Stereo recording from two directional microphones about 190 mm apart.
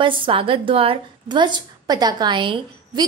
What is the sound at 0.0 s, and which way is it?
A woman's voice, 25° right (ahead or behind).